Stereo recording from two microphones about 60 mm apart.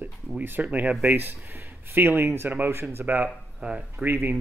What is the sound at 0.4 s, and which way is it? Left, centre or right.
A man's voice, right.